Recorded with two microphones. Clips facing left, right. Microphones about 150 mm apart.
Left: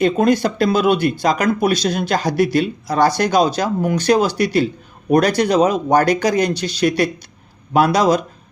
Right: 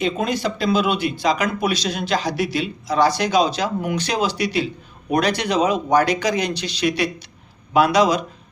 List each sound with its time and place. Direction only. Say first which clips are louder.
0.0 s speech: left 7 dB; 50° left (ahead or behind)